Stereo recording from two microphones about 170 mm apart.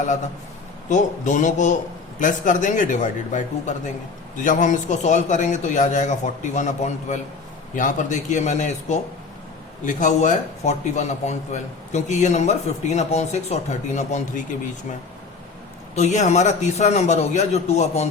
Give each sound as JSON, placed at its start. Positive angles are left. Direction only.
{"t": 0.9, "sound": "a man's voice", "side_deg": 45}
{"t": 16.0, "sound": "a man's voice", "side_deg": 45}